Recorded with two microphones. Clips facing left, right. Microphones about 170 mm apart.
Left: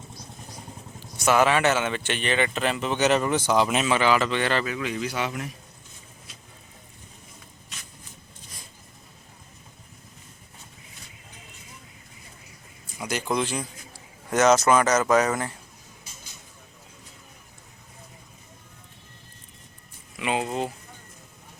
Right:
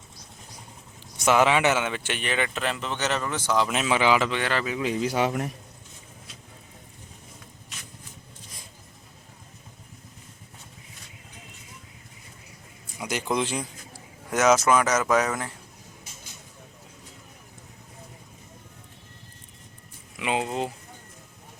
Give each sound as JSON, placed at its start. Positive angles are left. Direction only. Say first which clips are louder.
{"t": 1.2, "sound": "a man's voice", "louder": "even", "side_deg": -15}
{"t": 3.8, "sound": "a man's voice", "louder": "even", "side_deg": -15}
{"t": 4.8, "sound": "a man's voice", "louder": "right 4 dB", "side_deg": -30}
{"t": 13.3, "sound": "speech", "louder": "even", "side_deg": -20}
{"t": 14.3, "sound": "a man's voice", "louder": "left 1 dB", "side_deg": -5}
{"t": 20.1, "sound": "speech", "louder": "even", "side_deg": -15}